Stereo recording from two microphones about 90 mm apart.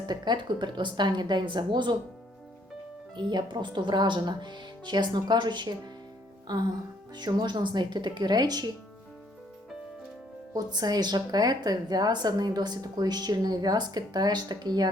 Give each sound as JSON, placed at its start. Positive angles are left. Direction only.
{"t": 0.1, "sound": "speech", "side_deg": -55}
{"t": 3.2, "sound": "a woman's voice", "side_deg": -55}
{"t": 10.5, "sound": "a woman's voice", "side_deg": -45}